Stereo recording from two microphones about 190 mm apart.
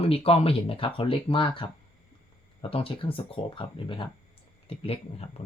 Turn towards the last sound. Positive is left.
turn(degrees=30)  # may be behind; listen again after turning